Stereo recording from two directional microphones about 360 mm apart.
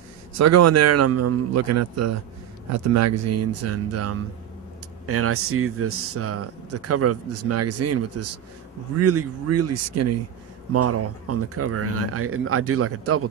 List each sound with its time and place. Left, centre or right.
0.3 s a man's voice: right